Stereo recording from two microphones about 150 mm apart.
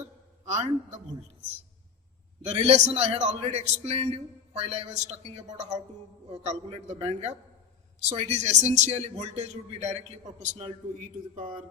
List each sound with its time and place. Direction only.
0.4 s a man's voice: 50° right (ahead or behind)
2.5 s a man's voice: 45° right (ahead or behind); by 11.6 s 65° right (ahead or behind)